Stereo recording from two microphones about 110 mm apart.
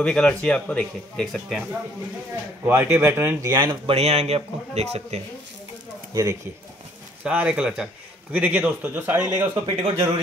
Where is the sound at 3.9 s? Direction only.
70° right (ahead or behind).